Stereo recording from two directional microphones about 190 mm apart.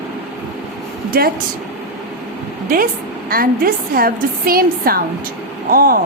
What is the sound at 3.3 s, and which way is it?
A woman's voice, 50° right (ahead or behind).